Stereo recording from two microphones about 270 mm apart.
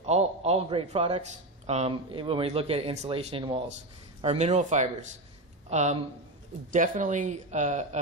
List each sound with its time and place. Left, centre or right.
0.4 s a man's voice: right